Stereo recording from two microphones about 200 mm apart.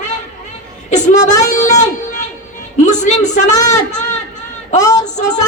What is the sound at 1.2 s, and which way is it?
A woman's voice, 35° left (ahead or behind).